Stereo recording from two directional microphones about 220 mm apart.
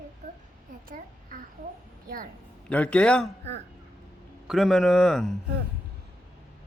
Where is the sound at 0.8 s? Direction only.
40° right (ahead or behind).